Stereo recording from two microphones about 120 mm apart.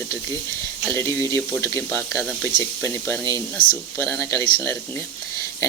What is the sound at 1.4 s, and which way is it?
Speech, 15° left (ahead or behind).